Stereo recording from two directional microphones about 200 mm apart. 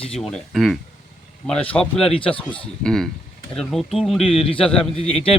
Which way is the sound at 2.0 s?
25° left (ahead or behind).